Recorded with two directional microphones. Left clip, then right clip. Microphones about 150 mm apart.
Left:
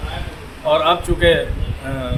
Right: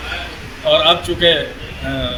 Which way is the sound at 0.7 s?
15° left (ahead or behind).